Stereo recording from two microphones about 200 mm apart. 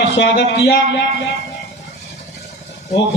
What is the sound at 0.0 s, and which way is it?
A man's voice, 60° left (ahead or behind).